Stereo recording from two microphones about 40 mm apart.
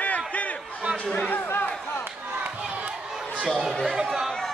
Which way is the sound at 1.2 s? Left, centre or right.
Left.